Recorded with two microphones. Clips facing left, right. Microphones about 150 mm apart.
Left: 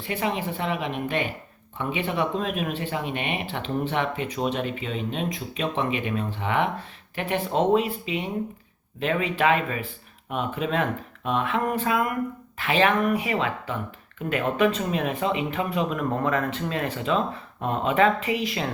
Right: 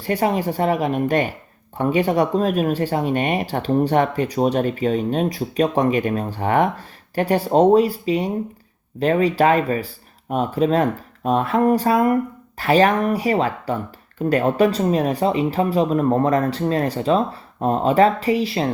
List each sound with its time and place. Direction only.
0.0 s a woman's voice: 40° right (ahead or behind)